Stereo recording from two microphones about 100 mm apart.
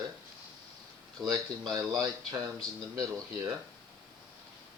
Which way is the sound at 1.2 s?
40° right (ahead or behind).